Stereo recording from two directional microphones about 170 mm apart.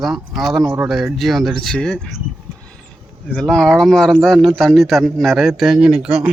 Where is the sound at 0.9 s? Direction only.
Centre (ahead or behind).